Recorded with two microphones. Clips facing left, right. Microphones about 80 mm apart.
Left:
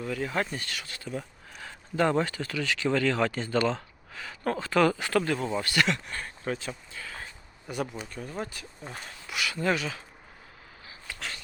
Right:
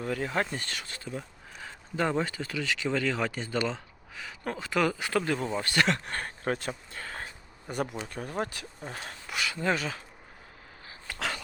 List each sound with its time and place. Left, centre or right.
0.0 s speech: right
0.3 s speech: right
1.6 s a sound: centre
2.2 s speech: right
5.5 s speech: right
5.9 s speech: right
7.7 s speech: right
8.0 s speech: right
9.3 s speech: right
11.1 s speech: right